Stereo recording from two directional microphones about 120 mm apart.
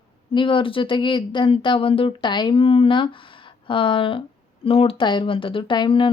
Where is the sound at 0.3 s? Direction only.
45° left (ahead or behind).